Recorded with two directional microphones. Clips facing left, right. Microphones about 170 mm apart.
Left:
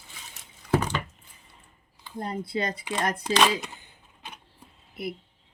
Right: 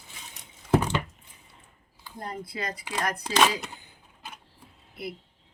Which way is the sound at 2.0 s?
25° left (ahead or behind).